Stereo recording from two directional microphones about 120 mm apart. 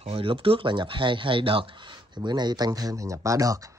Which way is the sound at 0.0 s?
50° right (ahead or behind).